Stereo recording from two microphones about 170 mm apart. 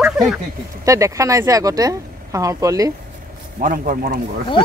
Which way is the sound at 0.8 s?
20° right (ahead or behind).